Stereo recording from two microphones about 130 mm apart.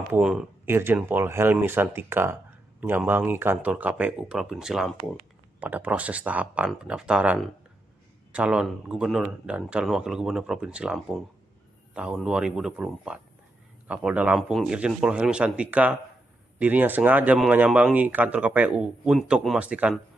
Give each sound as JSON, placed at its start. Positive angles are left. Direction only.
{"t": 0.2, "sound": "speech", "side_deg": -5}
{"t": 0.7, "sound": "a man's voice", "side_deg": -15}